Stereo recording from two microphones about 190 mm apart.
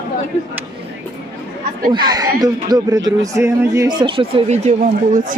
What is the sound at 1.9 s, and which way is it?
Speech, 20° right (ahead or behind).